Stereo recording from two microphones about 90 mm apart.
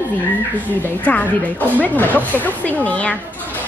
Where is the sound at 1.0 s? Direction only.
15° left (ahead or behind).